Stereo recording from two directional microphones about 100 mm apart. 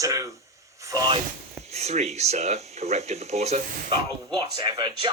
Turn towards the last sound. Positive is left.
turn(degrees=-55)  # may be behind; listen again after turning